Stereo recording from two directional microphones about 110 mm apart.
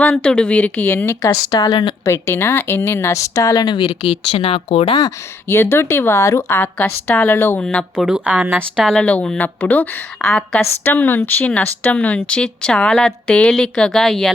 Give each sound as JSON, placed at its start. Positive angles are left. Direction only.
{"t": 0.0, "sound": "speech", "side_deg": 10}
{"t": 1.0, "sound": "speech", "side_deg": 25}
{"t": 2.0, "sound": "speech", "side_deg": 25}
{"t": 5.5, "sound": "speech", "side_deg": 20}
{"t": 7.6, "sound": "speech", "side_deg": 10}
{"t": 8.0, "sound": "a woman's voice", "side_deg": -10}
{"t": 8.6, "sound": "speech", "side_deg": 5}